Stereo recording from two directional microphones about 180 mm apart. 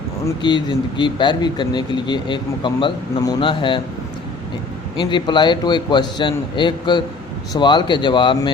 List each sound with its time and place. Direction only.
0.3 s speech: 25° left (ahead or behind)
4.9 s speech: 25° left (ahead or behind)